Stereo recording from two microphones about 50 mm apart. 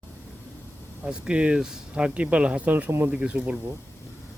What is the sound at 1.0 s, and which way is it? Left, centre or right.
Speech, centre.